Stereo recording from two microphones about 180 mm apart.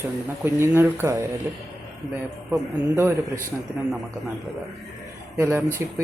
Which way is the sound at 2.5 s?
15° right (ahead or behind).